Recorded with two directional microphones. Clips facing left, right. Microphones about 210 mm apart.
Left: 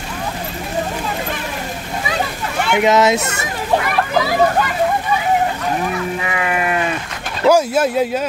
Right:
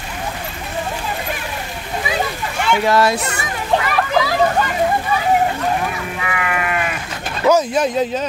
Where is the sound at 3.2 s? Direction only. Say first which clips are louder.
Left 1 dB; 45° left (ahead or behind).